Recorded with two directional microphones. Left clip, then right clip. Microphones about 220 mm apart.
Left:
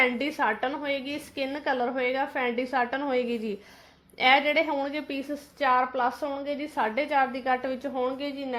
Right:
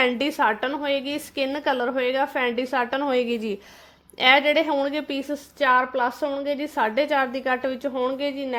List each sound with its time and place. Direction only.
0.0 s a woman's voice: 40° right (ahead or behind)